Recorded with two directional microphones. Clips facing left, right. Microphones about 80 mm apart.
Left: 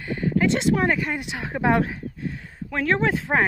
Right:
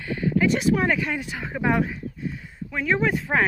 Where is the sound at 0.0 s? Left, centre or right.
Left.